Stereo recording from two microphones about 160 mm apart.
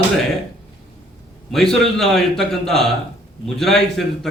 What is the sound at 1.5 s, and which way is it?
A man's voice, centre (ahead or behind).